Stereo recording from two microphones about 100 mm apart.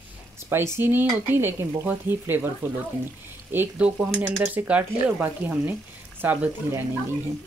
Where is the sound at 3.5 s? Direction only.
15° right (ahead or behind).